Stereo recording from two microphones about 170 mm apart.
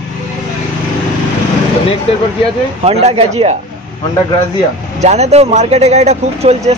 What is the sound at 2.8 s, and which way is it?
Speech, 40° right (ahead or behind).